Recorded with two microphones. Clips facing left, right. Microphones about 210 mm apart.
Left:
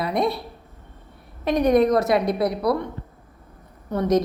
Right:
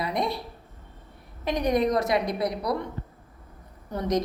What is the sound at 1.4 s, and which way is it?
Speech, 55° left (ahead or behind).